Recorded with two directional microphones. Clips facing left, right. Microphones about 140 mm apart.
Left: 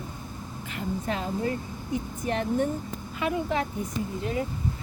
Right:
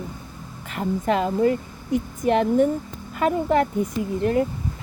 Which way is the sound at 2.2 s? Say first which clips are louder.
Right 10 dB; 90° right.